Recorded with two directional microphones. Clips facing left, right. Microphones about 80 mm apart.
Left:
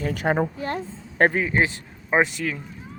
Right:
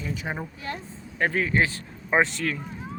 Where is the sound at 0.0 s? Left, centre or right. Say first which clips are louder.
Left 9 dB; left.